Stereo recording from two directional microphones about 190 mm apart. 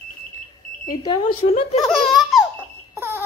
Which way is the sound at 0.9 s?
20° left (ahead or behind).